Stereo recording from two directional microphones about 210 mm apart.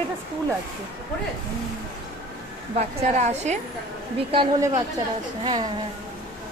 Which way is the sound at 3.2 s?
35° right (ahead or behind).